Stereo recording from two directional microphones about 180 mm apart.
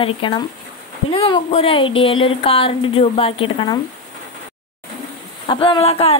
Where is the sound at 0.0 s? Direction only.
30° left (ahead or behind).